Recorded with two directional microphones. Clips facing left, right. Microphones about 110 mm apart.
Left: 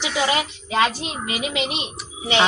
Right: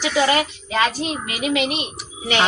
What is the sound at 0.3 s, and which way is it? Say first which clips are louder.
A woman's voice: right 3 dB; 20° left (ahead or behind).